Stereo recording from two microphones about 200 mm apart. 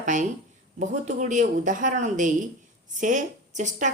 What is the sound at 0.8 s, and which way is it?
Speech, 35° right (ahead or behind).